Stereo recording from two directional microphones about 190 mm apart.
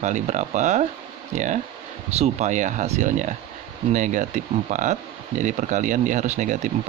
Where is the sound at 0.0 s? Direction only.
40° right (ahead or behind).